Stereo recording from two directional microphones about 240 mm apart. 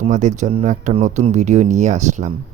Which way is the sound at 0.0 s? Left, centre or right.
Right.